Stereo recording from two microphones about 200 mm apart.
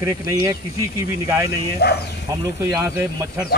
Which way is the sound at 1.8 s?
55° left (ahead or behind).